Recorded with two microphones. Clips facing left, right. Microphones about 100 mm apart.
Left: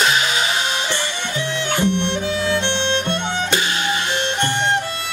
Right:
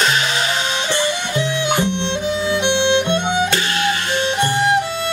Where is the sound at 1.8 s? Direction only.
15° right (ahead or behind).